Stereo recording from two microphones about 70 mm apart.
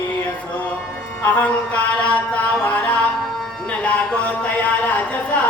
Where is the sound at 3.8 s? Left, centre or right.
Left.